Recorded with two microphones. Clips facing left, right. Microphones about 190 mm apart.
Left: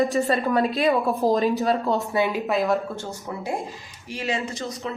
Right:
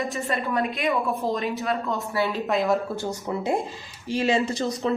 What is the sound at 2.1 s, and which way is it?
Speech, 15° left (ahead or behind).